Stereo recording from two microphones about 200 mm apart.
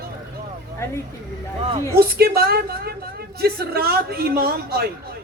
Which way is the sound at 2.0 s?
50° right (ahead or behind).